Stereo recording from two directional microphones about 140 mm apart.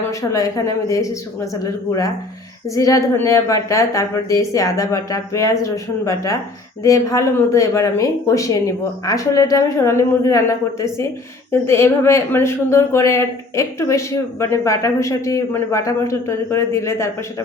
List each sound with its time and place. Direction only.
0.1 s speech: 20° left (ahead or behind)
2.6 s speech: 25° left (ahead or behind)